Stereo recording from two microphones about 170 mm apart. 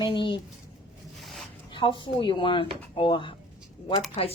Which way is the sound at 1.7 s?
30° left (ahead or behind).